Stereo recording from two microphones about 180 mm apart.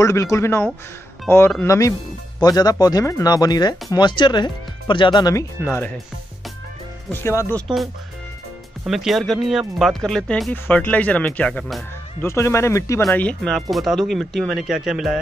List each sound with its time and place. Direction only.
0.0 s speech: 15° left (ahead or behind)
7.1 s speech: 15° left (ahead or behind)
7.6 s speech: centre (ahead or behind)
12.2 s speech: 15° left (ahead or behind); by 15.1 s 5° right (ahead or behind)